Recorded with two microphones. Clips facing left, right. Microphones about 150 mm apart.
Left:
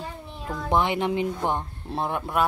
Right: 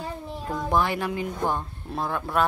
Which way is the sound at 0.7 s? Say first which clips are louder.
Left 2 dB; 20° left (ahead or behind).